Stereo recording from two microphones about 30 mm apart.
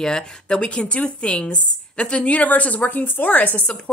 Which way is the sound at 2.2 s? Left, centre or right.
Left.